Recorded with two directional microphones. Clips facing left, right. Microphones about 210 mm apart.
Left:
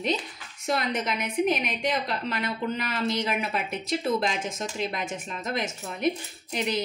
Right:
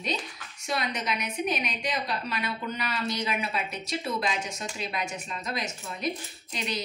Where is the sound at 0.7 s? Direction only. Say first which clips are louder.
Left 3 dB; 55° left (ahead or behind).